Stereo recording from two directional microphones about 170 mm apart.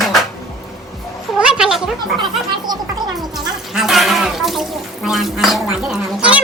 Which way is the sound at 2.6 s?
25° right (ahead or behind).